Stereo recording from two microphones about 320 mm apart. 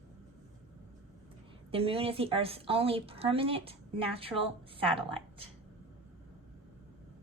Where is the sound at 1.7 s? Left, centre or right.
Centre.